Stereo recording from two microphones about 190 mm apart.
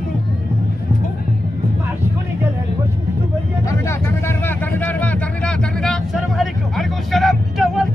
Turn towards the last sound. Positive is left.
turn(degrees=0)  # may be behind; listen again after turning